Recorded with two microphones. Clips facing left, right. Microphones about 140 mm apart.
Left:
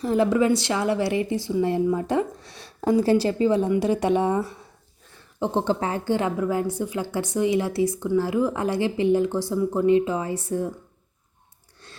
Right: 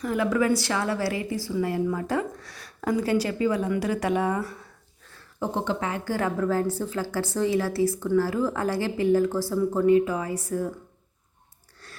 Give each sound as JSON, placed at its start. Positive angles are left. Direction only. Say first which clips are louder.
{"t": 0.0, "sound": "a woman's voice", "louder": "left 4 dB", "side_deg": 30}
{"t": 5.5, "sound": "speech", "louder": "left 5 dB", "side_deg": 30}
{"t": 6.1, "sound": "a woman's voice", "louder": "right 3 dB", "side_deg": 15}
{"t": 11.8, "sound": "chewing", "louder": "even", "side_deg": 20}